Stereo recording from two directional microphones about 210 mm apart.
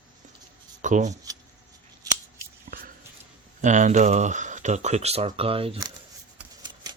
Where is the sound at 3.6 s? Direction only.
35° right (ahead or behind).